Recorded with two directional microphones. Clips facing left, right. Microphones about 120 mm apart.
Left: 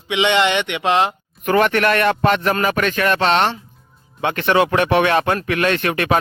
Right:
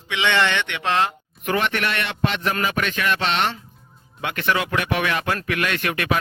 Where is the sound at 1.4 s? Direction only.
45° left (ahead or behind).